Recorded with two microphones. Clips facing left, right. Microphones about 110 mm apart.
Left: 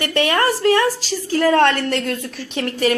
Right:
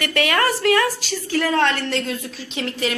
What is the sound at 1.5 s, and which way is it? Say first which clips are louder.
A woman's voice: left 5 dB; 55° left (ahead or behind).